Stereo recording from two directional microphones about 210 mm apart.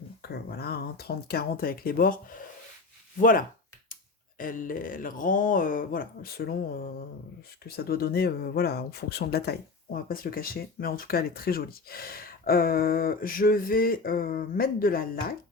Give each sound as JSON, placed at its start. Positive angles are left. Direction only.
{"t": 0.2, "sound": "speech", "side_deg": 50}
{"t": 3.2, "sound": "speech", "side_deg": 40}
{"t": 7.9, "sound": "speech", "side_deg": 50}